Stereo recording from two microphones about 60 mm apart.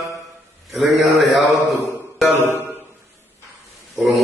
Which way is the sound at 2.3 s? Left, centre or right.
Right.